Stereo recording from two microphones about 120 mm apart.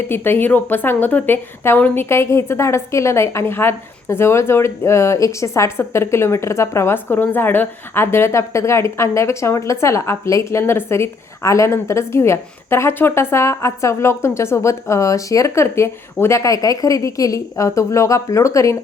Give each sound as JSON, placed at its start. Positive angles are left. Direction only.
{"t": 0.1, "sound": "a woman's voice", "side_deg": 15}